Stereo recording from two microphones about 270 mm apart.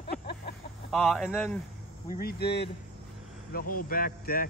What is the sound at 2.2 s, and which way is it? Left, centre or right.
Speech, left.